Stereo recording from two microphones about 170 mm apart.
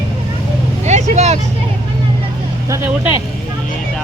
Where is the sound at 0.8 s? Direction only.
40° right (ahead or behind).